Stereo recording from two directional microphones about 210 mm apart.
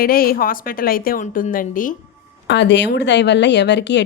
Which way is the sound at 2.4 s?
55° left (ahead or behind).